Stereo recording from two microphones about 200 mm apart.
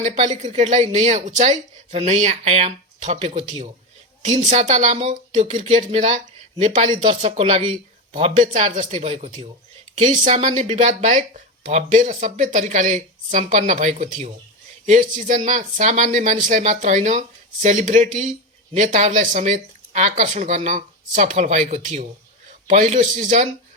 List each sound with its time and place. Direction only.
0.0 s speech: 35° right (ahead or behind)
6.9 s speech: 25° right (ahead or behind)